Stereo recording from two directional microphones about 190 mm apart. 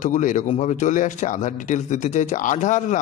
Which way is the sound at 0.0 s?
40° left (ahead or behind).